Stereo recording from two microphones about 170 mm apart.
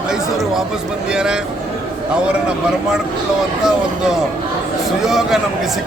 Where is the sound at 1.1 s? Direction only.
5° right (ahead or behind).